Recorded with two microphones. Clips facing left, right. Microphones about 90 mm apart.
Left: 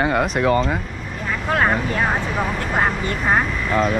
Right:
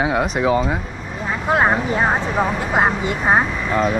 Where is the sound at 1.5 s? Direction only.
20° right (ahead or behind).